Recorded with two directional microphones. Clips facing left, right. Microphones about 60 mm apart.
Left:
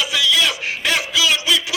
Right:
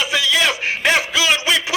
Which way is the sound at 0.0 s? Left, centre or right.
Right.